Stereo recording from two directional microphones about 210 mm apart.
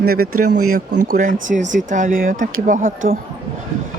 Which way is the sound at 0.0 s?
45° right (ahead or behind).